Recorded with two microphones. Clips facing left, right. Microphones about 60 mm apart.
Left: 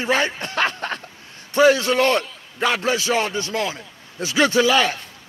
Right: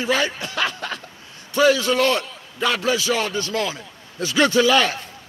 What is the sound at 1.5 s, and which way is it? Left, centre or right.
A man's voice, left.